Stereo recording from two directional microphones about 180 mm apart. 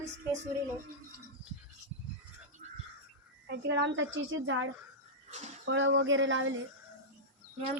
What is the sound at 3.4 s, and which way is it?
Speech, 70° right (ahead or behind).